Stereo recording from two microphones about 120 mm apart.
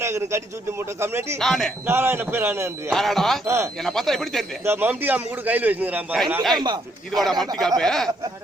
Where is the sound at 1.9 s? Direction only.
20° right (ahead or behind).